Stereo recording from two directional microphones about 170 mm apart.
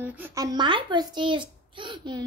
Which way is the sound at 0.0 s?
10° right (ahead or behind).